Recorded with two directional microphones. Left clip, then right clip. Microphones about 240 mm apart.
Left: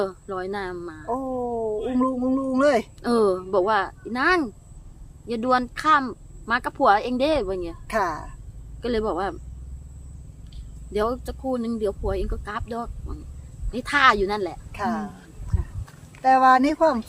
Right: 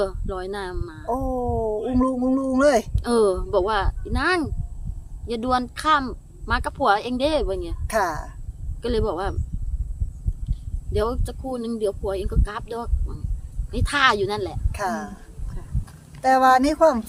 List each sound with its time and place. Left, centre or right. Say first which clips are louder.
0.0 s speech: right 1 dB; centre
1.1 s speech: right 2 dB; right
2.9 s speech: right 1 dB; centre
7.9 s speech: right 2 dB; right
8.8 s speech: even; centre
10.9 s speech: even; centre
14.7 s a woman's voice: right 3 dB; right
16.2 s speech: even; right